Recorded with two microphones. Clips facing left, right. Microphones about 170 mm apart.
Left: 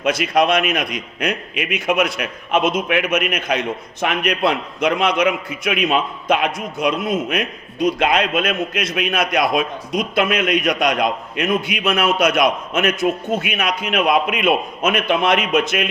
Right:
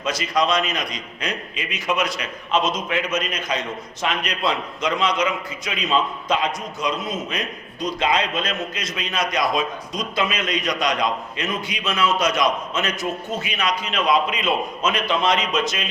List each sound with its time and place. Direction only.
0.0 s a man's voice: 60° left (ahead or behind)